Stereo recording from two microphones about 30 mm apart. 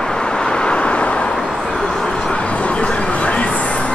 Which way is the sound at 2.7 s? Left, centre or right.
Left.